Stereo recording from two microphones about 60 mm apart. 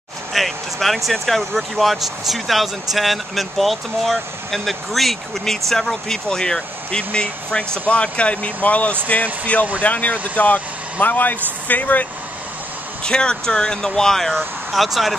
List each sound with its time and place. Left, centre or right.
0.3 s speech: centre; by 12.1 s left
13.0 s speech: centre